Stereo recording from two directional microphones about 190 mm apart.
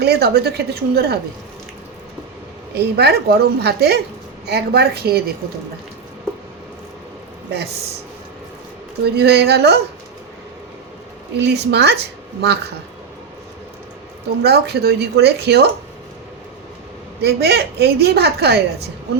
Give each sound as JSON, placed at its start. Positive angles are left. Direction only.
{"t": 0.0, "sound": "a woman's voice", "side_deg": -60}
{"t": 2.7, "sound": "a woman's voice", "side_deg": -60}
{"t": 9.0, "sound": "a woman's voice", "side_deg": -60}
{"t": 11.3, "sound": "a woman's voice", "side_deg": -60}
{"t": 14.4, "sound": "a woman's voice", "side_deg": -60}
{"t": 17.2, "sound": "a woman's voice", "side_deg": -60}